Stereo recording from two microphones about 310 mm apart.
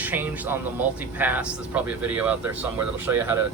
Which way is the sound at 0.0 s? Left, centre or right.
Centre.